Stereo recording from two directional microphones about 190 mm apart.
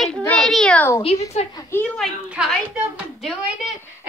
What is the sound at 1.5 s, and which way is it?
Speech, 10° left (ahead or behind).